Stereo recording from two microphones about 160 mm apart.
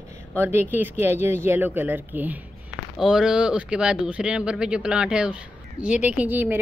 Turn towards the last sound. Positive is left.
turn(degrees=-10)  # may be behind; listen again after turning